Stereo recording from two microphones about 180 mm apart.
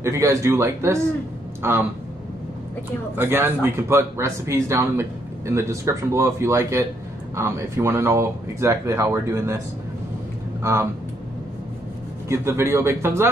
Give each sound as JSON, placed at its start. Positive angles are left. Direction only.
{"t": 0.0, "sound": "speech", "side_deg": -15}
{"t": 3.2, "sound": "speech", "side_deg": -10}
{"t": 10.6, "sound": "speech", "side_deg": -15}
{"t": 12.3, "sound": "speech", "side_deg": -15}